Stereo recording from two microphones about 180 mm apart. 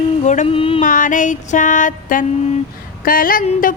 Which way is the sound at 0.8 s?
45° left (ahead or behind).